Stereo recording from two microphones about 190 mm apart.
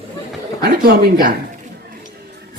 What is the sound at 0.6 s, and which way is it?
Speech, 55° right (ahead or behind).